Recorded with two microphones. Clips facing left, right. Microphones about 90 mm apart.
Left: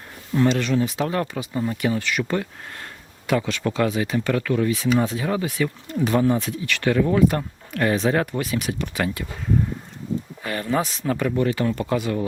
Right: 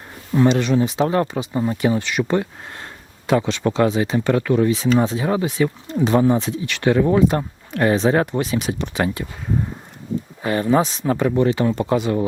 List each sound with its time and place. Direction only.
0.3 s speech: 20° right (ahead or behind)
10.4 s speech: 25° right (ahead or behind)